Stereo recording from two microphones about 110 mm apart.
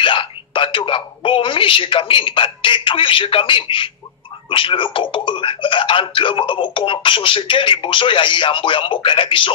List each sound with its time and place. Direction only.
0.0 s a woman's voice: 50° left (ahead or behind)